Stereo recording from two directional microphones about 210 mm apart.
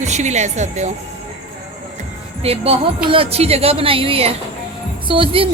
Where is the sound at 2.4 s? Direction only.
30° right (ahead or behind).